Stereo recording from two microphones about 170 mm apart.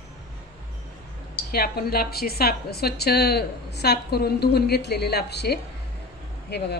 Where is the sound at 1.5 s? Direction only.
65° left (ahead or behind).